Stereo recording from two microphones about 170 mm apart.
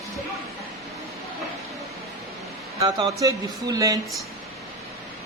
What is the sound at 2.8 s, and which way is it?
Speech, 20° right (ahead or behind).